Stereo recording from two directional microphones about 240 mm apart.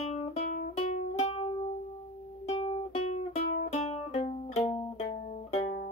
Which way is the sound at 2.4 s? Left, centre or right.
Left.